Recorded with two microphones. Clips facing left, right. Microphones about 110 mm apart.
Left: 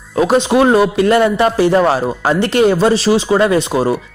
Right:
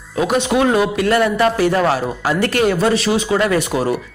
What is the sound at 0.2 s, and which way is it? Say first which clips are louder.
A man's voice: left 4 dB; 30° left (ahead or behind).